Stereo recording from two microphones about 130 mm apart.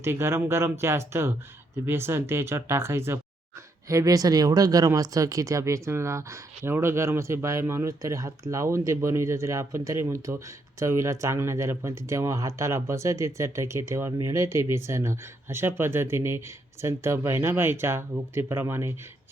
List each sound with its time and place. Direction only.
0.0 s speech: 20° right (ahead or behind)